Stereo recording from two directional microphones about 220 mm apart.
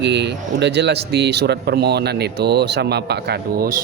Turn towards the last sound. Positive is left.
turn(degrees=-40)  # may be behind; listen again after turning